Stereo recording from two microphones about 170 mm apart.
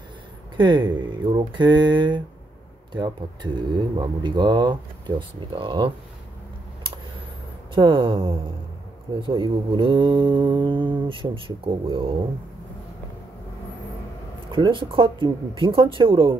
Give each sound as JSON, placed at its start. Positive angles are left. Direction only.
{"t": 0.6, "sound": "mantra", "side_deg": -25}
{"t": 7.7, "sound": "mantra", "side_deg": -30}
{"t": 14.5, "sound": "mantra", "side_deg": -30}